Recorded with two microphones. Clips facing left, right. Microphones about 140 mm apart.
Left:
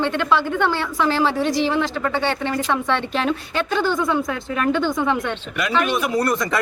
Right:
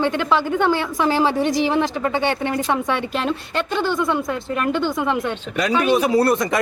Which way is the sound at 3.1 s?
Centre (ahead or behind).